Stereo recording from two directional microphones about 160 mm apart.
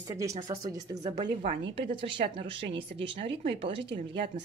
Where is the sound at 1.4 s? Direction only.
45° right (ahead or behind).